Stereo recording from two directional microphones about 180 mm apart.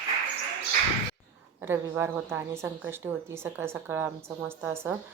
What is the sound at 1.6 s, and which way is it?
Speech, 15° right (ahead or behind).